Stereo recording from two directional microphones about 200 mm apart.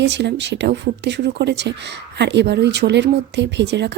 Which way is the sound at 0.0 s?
60° right (ahead or behind).